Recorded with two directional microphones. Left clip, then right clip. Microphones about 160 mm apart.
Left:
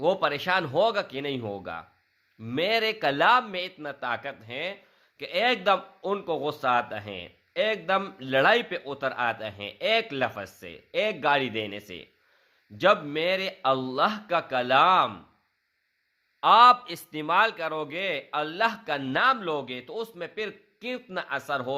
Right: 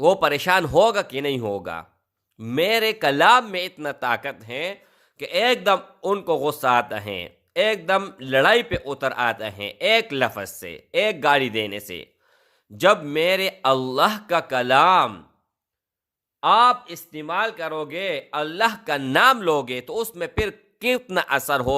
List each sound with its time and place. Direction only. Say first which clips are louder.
0.0 s a man's voice: right 7 dB; 40° right (ahead or behind)
16.4 s speech: right 1 dB; 15° right (ahead or behind)
16.8 s a man's voice: left 1 dB; centre (ahead or behind); by 21.8 s 50° right (ahead or behind)